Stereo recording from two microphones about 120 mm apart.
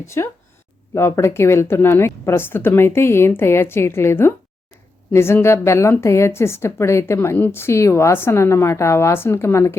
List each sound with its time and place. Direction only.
0.0 s a woman's voice: 25° left (ahead or behind)